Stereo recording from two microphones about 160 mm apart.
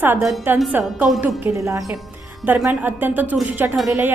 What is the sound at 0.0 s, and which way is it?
A woman's voice, 15° right (ahead or behind).